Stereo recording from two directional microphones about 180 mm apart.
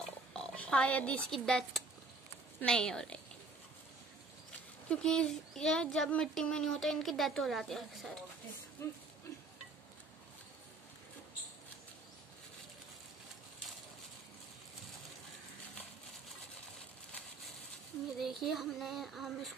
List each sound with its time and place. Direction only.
0.3 s speech: 5° left (ahead or behind)
4.8 s speech: 5° left (ahead or behind)
18.2 s speech: centre (ahead or behind)